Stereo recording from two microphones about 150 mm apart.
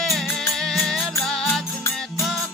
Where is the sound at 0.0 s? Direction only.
Centre (ahead or behind).